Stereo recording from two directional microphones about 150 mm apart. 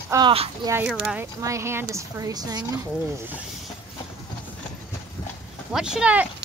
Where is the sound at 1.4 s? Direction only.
20° right (ahead or behind).